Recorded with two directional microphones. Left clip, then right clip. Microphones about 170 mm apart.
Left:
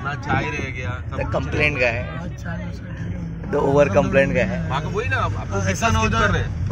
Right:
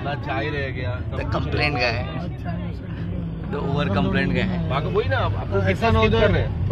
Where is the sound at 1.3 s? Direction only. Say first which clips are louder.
Left 2 dB; 20° left (ahead or behind).